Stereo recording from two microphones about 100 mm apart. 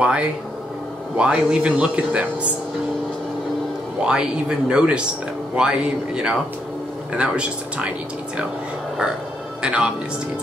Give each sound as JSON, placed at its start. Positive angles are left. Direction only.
{"t": 0.0, "sound": "a man's voice", "side_deg": -10}
{"t": 4.0, "sound": "a man's voice", "side_deg": -10}
{"t": 9.6, "sound": "a man's voice", "side_deg": -10}